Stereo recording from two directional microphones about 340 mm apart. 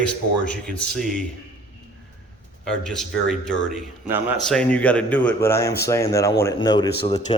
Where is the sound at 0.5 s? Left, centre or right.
Centre.